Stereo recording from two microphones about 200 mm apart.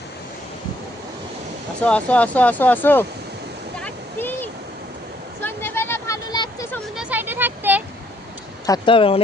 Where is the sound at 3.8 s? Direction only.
10° left (ahead or behind).